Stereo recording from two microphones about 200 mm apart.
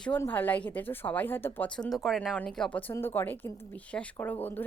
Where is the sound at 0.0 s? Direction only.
10° left (ahead or behind).